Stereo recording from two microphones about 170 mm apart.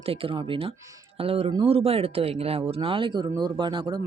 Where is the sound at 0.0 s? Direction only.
35° right (ahead or behind).